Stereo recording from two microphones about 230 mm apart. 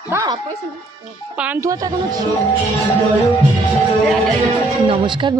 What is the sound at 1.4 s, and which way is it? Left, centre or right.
Speech, centre.